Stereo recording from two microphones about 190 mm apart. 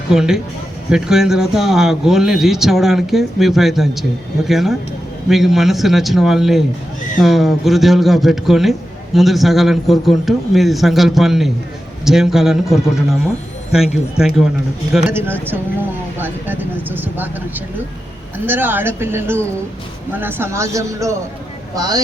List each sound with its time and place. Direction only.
0.1 s speech: 5° right (ahead or behind); by 22.0 s 20° right (ahead or behind)